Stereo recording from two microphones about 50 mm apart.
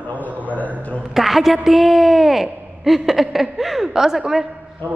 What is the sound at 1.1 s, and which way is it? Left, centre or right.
A woman's voice, centre.